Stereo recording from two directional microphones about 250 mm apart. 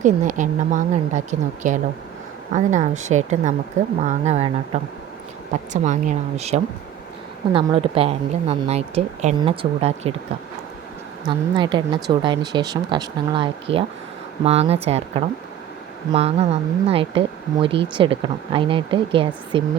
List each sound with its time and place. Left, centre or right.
0.0 s a woman's voice: right
11.3 s a woman's voice: centre